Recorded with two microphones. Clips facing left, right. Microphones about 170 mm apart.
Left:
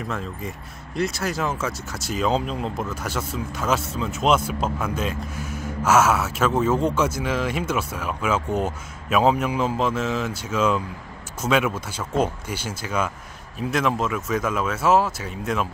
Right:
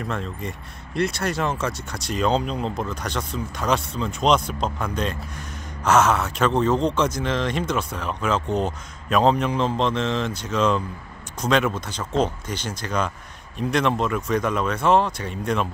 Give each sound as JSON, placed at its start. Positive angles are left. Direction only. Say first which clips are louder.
{"t": 0.0, "sound": "speech", "louder": "right 1 dB", "side_deg": 0}